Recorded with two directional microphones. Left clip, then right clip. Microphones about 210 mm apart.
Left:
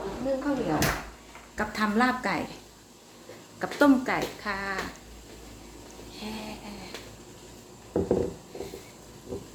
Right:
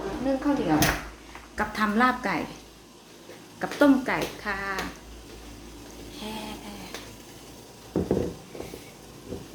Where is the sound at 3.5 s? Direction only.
5° left (ahead or behind).